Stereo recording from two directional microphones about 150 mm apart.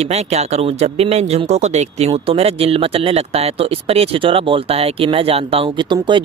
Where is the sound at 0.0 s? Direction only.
45° right (ahead or behind).